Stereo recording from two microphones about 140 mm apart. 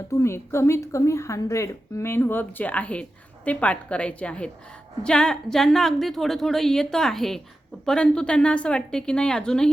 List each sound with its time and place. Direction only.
0.1 s a woman's voice: 20° left (ahead or behind)